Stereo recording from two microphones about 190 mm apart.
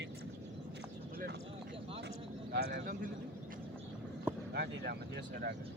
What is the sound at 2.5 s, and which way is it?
Speech, 55° right (ahead or behind).